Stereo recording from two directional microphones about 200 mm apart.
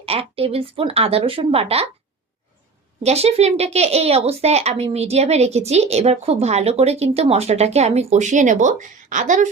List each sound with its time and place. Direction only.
0.0 s speech: 30° right (ahead or behind)
3.0 s speech: 30° right (ahead or behind)